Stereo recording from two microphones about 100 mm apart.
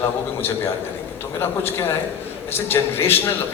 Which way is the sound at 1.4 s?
25° left (ahead or behind).